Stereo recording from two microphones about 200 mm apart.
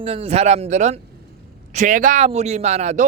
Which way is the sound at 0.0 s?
30° right (ahead or behind).